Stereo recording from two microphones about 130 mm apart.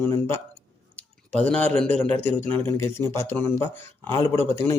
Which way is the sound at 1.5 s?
10° left (ahead or behind).